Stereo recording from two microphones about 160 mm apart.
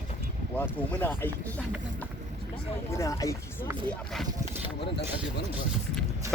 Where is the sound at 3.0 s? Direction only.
20° left (ahead or behind).